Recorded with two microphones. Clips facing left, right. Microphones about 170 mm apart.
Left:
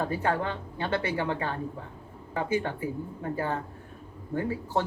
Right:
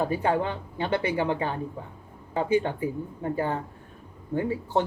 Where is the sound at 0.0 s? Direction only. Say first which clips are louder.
Right 3 dB; 15° right (ahead or behind).